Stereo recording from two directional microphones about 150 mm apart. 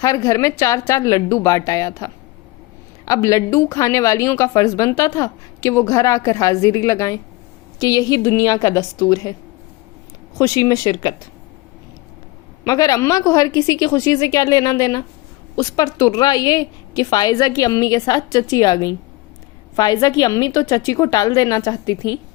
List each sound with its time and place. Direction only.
0.0 s a woman's voice: 20° left (ahead or behind)
10.3 s a woman's voice: 20° left (ahead or behind)
12.6 s a woman's voice: 25° left (ahead or behind)